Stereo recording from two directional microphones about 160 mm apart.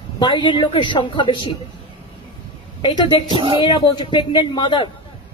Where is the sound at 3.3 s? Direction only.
30° right (ahead or behind).